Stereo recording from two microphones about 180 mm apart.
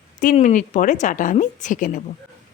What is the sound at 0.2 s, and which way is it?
Speech, 45° left (ahead or behind).